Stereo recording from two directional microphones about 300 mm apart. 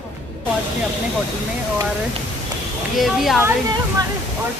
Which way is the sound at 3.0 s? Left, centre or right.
Centre.